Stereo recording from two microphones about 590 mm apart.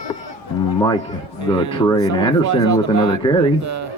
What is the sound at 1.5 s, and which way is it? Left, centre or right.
Speech, centre.